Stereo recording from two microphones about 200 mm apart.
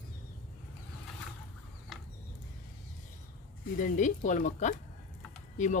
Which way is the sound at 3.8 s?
40° left (ahead or behind).